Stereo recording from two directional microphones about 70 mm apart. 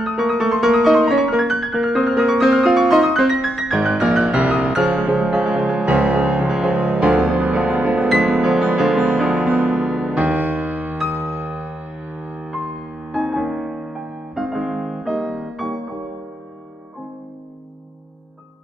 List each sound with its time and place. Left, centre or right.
0.0 s music: centre
3.7 s music: centre
8.1 s music: centre
10.2 s music: right; by 15.8 s centre